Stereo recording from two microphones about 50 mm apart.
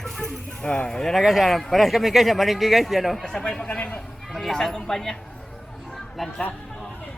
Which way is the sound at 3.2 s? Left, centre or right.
Centre.